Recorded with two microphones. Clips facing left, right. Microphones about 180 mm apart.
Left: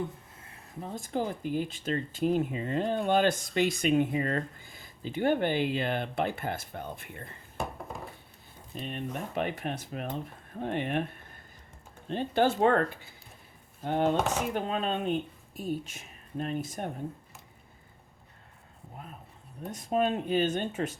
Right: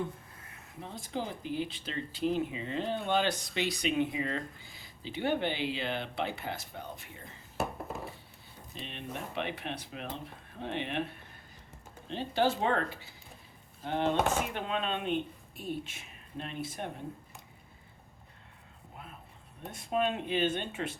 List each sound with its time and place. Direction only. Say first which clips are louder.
0.8 s speech: left 5 dB; 45° left (ahead or behind)
8.7 s speech: left 5 dB; 45° left (ahead or behind)
12.0 s speech: left 3 dB; 50° left (ahead or behind)
19.7 s speech: left 3 dB; 40° left (ahead or behind)